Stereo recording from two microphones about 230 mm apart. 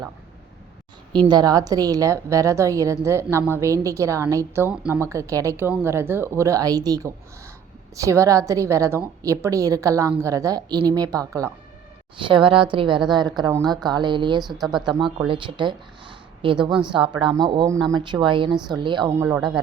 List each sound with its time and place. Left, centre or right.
1.1 s a woman's voice: centre